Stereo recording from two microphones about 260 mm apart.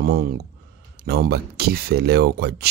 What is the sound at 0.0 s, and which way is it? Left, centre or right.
Speech, right.